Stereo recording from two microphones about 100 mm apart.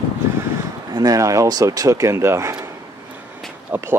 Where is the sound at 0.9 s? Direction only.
35° right (ahead or behind).